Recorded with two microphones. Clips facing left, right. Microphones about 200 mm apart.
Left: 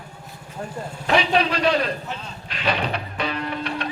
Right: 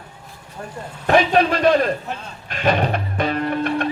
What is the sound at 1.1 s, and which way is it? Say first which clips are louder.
Speech: right 5 dB; 50° right (ahead or behind).